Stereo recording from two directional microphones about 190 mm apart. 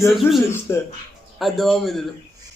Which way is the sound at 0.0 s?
Centre (ahead or behind).